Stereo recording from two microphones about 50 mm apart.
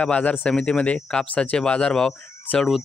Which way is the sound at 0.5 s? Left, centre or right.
Centre.